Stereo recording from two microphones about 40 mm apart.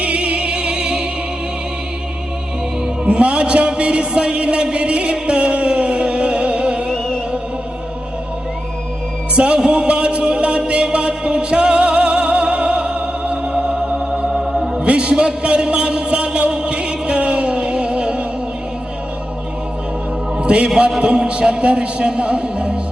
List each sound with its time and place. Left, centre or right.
0.0 s music: right
3.0 s a sound: right
9.3 s music: right
14.4 s music: centre
14.8 s a sound: right
15.4 s music: right
20.4 s music: right
21.0 s a man's voice: right
22.0 s music: right